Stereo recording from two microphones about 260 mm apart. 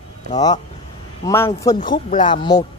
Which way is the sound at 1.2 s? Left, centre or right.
Centre.